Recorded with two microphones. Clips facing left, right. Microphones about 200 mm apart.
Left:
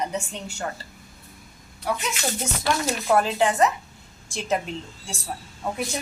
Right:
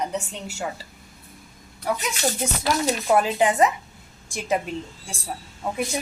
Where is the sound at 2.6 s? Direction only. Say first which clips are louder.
Right 2 dB; 10° right (ahead or behind).